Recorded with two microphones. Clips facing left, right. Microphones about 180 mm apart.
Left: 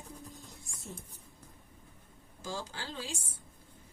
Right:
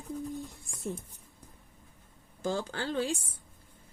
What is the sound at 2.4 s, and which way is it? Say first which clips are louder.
Speech: right 8 dB; 60° right (ahead or behind).